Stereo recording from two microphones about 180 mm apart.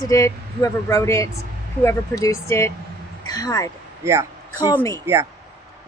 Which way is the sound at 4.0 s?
15° right (ahead or behind).